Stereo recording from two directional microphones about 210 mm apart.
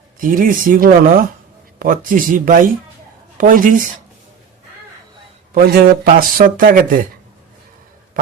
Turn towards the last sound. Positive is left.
turn(degrees=-40)  # may be behind; listen again after turning